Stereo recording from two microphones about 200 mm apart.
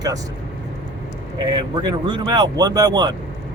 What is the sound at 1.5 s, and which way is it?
Speech, 20° right (ahead or behind).